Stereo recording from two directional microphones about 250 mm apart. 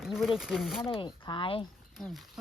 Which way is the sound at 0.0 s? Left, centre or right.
Centre.